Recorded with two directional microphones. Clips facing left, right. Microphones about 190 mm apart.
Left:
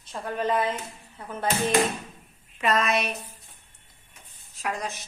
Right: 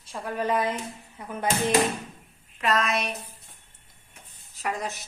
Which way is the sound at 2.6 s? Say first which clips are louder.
Left 1 dB; centre (ahead or behind).